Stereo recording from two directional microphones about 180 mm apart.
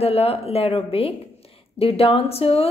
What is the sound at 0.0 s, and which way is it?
Speech, 35° left (ahead or behind).